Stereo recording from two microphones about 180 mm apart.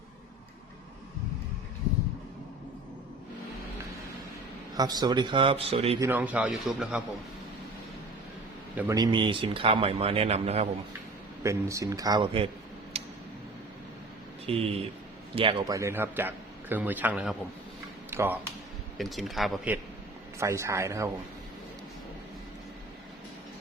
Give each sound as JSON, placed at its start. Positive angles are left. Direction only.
{"t": 4.8, "sound": "speech", "side_deg": -20}
{"t": 6.0, "sound": "a man's voice", "side_deg": -10}
{"t": 8.7, "sound": "a man's voice", "side_deg": -10}
{"t": 9.0, "sound": "speech", "side_deg": -25}
{"t": 11.4, "sound": "speech", "side_deg": -15}
{"t": 12.9, "sound": "tick-tock", "side_deg": -35}
{"t": 14.4, "sound": "speech", "side_deg": -35}
{"t": 15.6, "sound": "a man's voice", "side_deg": -15}
{"t": 18.9, "sound": "speech", "side_deg": 0}
{"t": 20.4, "sound": "a man's voice", "side_deg": -15}